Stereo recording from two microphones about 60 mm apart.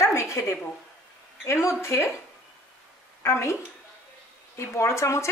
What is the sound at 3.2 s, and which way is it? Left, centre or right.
Speech, left.